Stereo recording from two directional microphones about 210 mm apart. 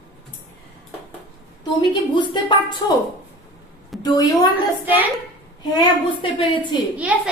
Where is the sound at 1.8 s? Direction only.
20° left (ahead or behind).